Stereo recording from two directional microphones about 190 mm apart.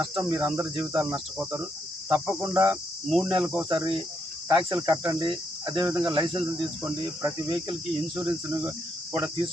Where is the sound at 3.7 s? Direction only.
25° right (ahead or behind).